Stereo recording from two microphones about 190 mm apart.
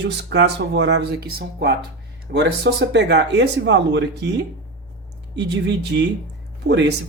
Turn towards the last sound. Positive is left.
turn(degrees=-65)  # may be behind; listen again after turning